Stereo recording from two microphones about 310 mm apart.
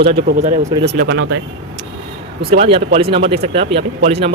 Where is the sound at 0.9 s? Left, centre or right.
Right.